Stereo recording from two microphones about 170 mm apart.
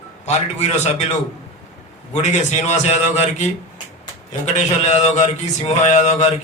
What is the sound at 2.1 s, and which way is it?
A man's voice, 40° left (ahead or behind).